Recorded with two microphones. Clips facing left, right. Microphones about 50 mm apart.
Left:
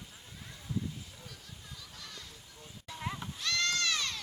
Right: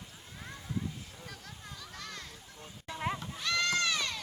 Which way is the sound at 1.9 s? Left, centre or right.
Right.